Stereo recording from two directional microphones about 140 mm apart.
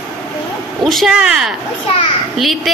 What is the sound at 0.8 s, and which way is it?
A woman's voice, centre (ahead or behind).